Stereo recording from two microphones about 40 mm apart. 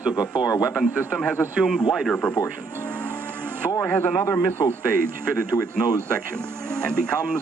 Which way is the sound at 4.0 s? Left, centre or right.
Left.